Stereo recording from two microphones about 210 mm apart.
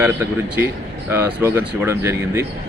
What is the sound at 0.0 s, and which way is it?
Speech, 10° right (ahead or behind).